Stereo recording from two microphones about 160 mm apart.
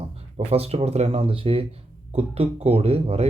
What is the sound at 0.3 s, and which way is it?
Speech, 40° right (ahead or behind).